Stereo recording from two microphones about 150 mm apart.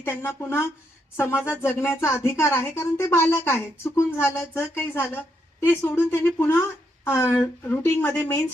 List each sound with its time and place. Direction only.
0.0 s speech: 15° left (ahead or behind)